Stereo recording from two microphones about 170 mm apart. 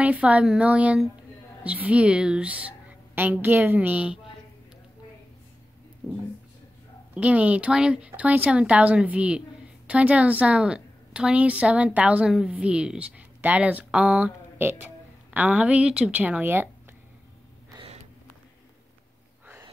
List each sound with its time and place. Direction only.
0.0 s a woman's voice: 10° right (ahead or behind)
7.2 s a woman's voice: 10° right (ahead or behind)
17.7 s gasp: 35° right (ahead or behind)